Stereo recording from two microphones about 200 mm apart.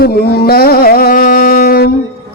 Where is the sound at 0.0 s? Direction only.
50° left (ahead or behind).